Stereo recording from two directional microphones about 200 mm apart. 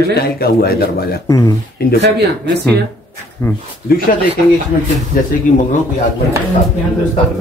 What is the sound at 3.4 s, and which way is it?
Speech, 10° left (ahead or behind).